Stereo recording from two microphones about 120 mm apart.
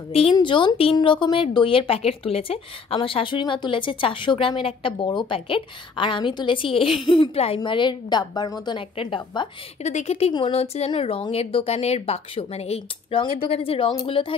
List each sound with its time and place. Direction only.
0.1 s a woman's voice: 50° left (ahead or behind)
9.8 s a woman's voice: 70° left (ahead or behind); by 14.3 s 50° left (ahead or behind)